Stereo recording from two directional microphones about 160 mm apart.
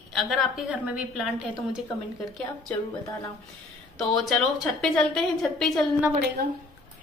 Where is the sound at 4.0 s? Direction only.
Centre (ahead or behind).